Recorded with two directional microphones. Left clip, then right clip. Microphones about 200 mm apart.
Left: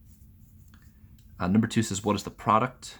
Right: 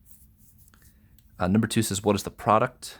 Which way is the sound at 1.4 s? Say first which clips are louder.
Right 2 dB; 45° right (ahead or behind).